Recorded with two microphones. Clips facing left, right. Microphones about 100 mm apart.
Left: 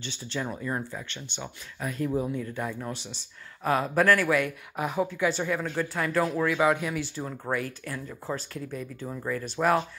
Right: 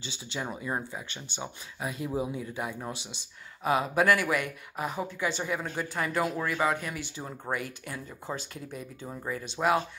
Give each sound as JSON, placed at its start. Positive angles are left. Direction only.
{"t": 0.0, "sound": "speech", "side_deg": -15}